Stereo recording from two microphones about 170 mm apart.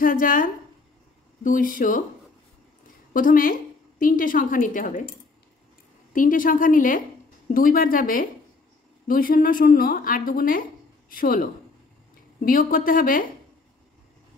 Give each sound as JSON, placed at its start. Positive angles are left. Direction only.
{"t": 0.0, "sound": "a woman's voice", "side_deg": 55}
{"t": 3.1, "sound": "a woman's voice", "side_deg": 55}
{"t": 6.1, "sound": "a woman's voice", "side_deg": 50}
{"t": 12.4, "sound": "a woman's voice", "side_deg": 55}